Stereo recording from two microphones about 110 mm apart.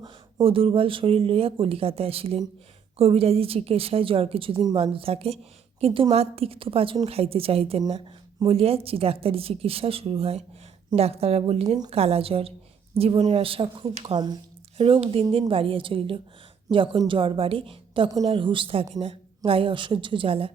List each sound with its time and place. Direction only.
0.4 s a woman's voice: 55° right (ahead or behind)
14.8 s a woman's voice: 60° right (ahead or behind)